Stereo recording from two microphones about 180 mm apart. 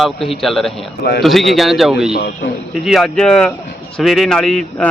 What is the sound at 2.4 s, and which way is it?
Speech, 55° left (ahead or behind).